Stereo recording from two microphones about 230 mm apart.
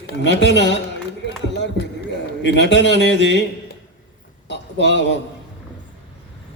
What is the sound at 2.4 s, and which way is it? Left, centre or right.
A man's voice, left.